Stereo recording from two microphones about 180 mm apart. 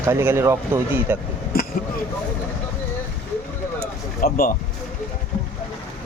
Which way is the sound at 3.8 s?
55° left (ahead or behind).